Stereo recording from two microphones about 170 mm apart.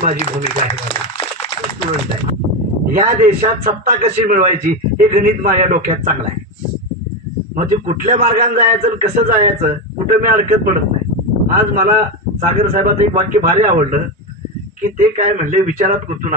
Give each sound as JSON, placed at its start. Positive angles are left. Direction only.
{"t": 2.9, "sound": "a man's voice", "side_deg": -50}
{"t": 7.5, "sound": "a man's voice", "side_deg": -50}